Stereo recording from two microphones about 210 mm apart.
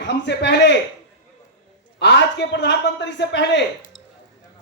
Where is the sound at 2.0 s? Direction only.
55° left (ahead or behind).